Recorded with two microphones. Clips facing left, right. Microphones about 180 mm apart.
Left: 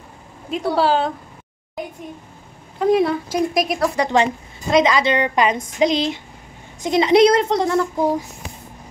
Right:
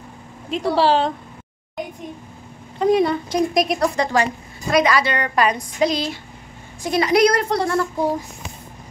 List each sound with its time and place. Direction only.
0.5 s a woman's voice: 5° left (ahead or behind)
2.8 s a woman's voice: centre (ahead or behind)
4.1 s a woman's voice: 25° left (ahead or behind)